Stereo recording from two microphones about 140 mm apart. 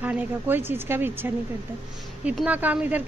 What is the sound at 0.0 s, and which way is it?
Speech, 15° right (ahead or behind).